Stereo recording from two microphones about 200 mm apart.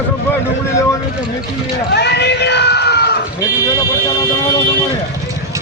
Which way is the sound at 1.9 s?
55° left (ahead or behind).